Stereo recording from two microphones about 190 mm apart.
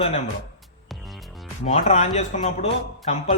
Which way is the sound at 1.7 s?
40° left (ahead or behind).